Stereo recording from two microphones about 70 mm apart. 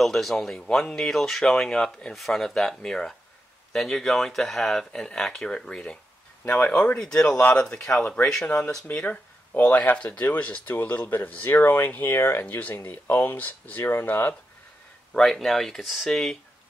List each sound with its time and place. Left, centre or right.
0.0 s speech: centre
8.5 s speech: left
15.1 s speech: centre